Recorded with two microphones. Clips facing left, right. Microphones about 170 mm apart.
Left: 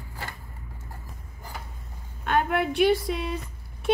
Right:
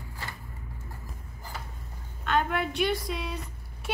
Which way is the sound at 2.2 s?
50° left (ahead or behind).